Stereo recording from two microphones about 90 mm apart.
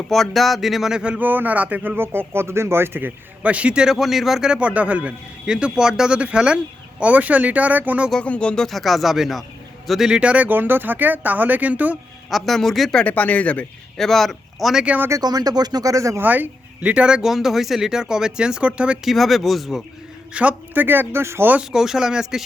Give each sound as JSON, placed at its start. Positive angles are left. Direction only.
{"t": 0.1, "sound": "speech", "side_deg": 0}
{"t": 8.1, "sound": "speech", "side_deg": 15}
{"t": 12.3, "sound": "speech", "side_deg": 5}
{"t": 14.0, "sound": "speech", "side_deg": 5}
{"t": 14.8, "sound": "speech", "side_deg": -20}
{"t": 15.1, "sound": "speech", "side_deg": -45}
{"t": 16.2, "sound": "speech", "side_deg": -20}
{"t": 19.1, "sound": "speech", "side_deg": 0}
{"t": 20.3, "sound": "speech", "side_deg": -15}
{"t": 21.6, "sound": "speech", "side_deg": -5}